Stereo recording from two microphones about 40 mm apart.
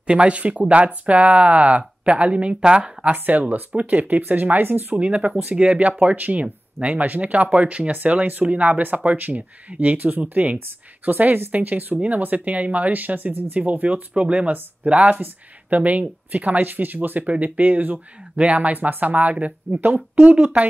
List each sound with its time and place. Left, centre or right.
0.0 s speech: right
3.3 s speech: right
4.9 s speech: right
6.9 s speech: right
14.1 s speech: right
15.7 s speech: right
18.3 s speech: right
18.7 s speech: right